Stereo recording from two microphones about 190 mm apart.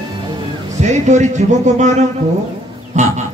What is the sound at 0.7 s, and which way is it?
Speech, 40° right (ahead or behind).